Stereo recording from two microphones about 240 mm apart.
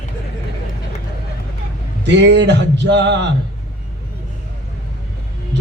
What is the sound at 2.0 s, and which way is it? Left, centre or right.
A man's voice, right.